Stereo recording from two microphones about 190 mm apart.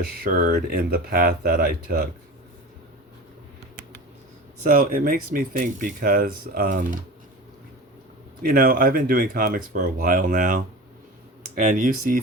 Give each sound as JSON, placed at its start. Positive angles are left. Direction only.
{"t": 0.0, "sound": "speech", "side_deg": -50}
{"t": 4.6, "sound": "speech", "side_deg": -45}
{"t": 8.4, "sound": "speech", "side_deg": -50}